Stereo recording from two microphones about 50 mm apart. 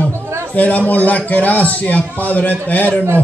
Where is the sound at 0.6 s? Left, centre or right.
Left.